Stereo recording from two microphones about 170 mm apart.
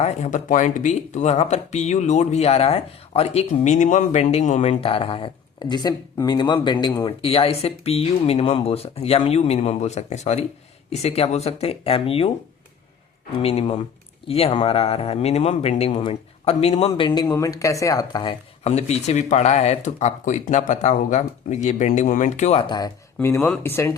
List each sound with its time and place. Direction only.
0.0 s speech: 45° left (ahead or behind)
13.4 s speech: 35° left (ahead or behind)
18.7 s speech: 40° left (ahead or behind)
23.1 s speech: 15° left (ahead or behind)